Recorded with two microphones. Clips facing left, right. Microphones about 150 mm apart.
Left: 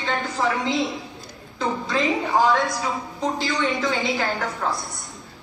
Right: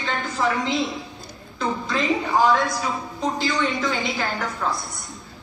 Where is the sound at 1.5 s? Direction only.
20° left (ahead or behind).